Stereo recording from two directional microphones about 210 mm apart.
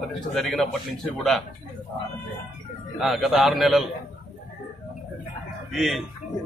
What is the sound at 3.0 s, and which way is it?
Speech, centre (ahead or behind).